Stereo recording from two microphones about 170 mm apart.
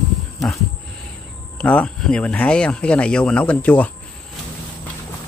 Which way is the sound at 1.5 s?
5° left (ahead or behind).